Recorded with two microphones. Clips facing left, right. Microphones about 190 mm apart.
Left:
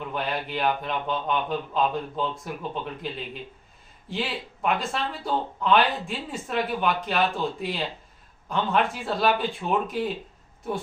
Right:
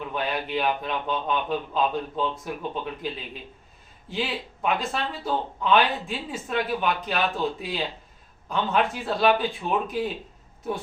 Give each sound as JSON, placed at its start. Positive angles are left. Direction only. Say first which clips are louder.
{"t": 0.1, "sound": "speech", "louder": "right 2 dB", "side_deg": 0}
{"t": 4.1, "sound": "speech", "louder": "right 1 dB", "side_deg": 0}